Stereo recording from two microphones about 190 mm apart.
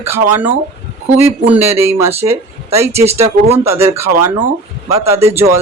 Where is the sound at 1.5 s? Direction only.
15° right (ahead or behind).